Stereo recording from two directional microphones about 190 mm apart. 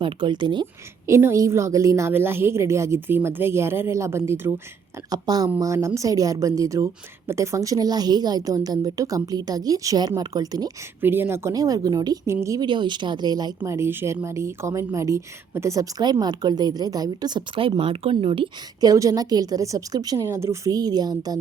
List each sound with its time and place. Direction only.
0.0 s a woman's voice: 25° right (ahead or behind)